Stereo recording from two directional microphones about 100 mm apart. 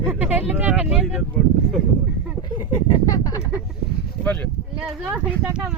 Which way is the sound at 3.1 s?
40° left (ahead or behind).